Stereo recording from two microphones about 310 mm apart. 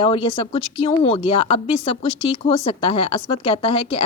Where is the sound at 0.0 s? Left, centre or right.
Centre.